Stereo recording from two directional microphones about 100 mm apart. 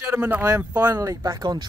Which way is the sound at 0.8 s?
35° right (ahead or behind).